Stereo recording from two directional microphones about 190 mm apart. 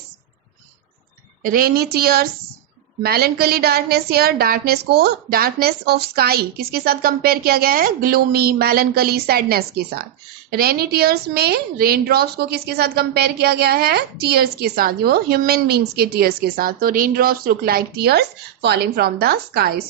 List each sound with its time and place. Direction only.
1.4 s a woman's voice: 50° right (ahead or behind)